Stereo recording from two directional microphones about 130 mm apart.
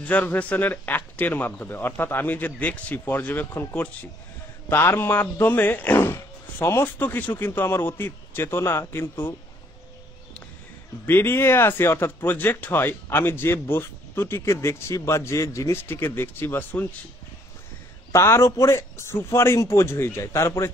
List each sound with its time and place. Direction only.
0.0 s speech: 10° left (ahead or behind)
11.1 s speech: 15° left (ahead or behind)
18.1 s a man's voice: 20° left (ahead or behind)